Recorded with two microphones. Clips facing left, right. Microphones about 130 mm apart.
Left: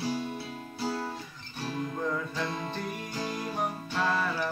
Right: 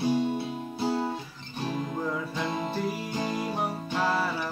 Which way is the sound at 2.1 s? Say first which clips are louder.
Right 2 dB; 20° right (ahead or behind).